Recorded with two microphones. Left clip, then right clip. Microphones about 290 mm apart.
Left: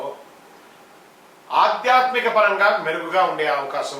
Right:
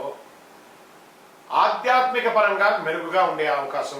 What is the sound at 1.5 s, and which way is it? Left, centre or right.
A man's voice, centre.